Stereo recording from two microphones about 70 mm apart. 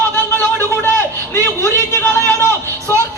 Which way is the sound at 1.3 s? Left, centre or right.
Left.